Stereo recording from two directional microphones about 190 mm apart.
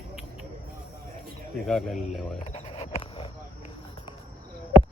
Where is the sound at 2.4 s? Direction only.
35° left (ahead or behind).